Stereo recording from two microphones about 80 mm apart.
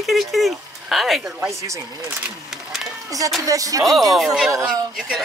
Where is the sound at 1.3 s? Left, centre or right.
Right.